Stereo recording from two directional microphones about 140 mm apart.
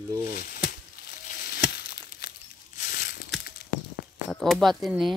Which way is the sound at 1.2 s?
90° left.